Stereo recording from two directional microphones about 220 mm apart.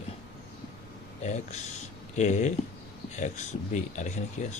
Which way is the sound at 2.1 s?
30° left (ahead or behind).